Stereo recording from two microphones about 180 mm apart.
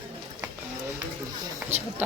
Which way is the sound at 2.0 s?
10° right (ahead or behind).